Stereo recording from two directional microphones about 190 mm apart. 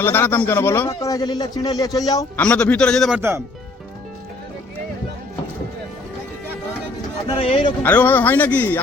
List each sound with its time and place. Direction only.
0.0 s speech: 10° left (ahead or behind)
2.4 s a man's voice: 5° left (ahead or behind)
3.2 s speech: 15° right (ahead or behind)
7.3 s speech: 30° left (ahead or behind)
7.8 s speech: 10° left (ahead or behind)